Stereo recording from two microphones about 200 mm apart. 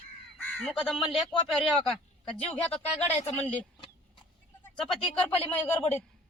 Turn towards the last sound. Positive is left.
turn(degrees=10)  # may be behind; listen again after turning